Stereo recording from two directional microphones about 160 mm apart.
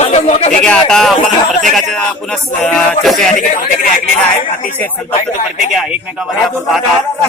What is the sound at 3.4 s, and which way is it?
Speech, 55° left (ahead or behind).